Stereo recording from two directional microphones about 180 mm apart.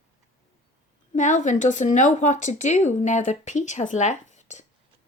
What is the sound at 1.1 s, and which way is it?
Speech, 45° left (ahead or behind).